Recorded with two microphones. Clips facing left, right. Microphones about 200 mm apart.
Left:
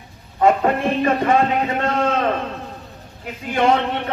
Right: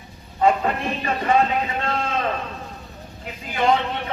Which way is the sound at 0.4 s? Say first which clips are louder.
Left 4 dB; 50° left (ahead or behind).